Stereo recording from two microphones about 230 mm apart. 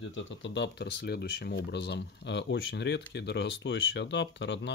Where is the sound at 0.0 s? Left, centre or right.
Left.